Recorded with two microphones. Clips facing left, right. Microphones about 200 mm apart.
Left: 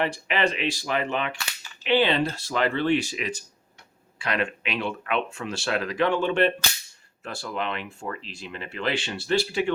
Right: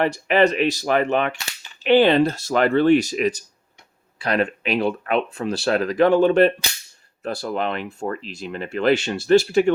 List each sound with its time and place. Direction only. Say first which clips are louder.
0.0 s speech: right 7 dB; 45° right (ahead or behind)